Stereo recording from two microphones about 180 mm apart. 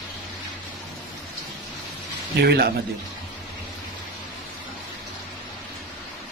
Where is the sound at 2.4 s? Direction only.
65° right (ahead or behind).